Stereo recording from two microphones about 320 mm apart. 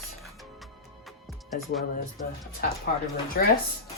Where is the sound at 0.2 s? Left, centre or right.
Centre.